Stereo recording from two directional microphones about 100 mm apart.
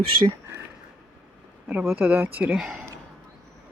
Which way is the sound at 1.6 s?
5° right (ahead or behind).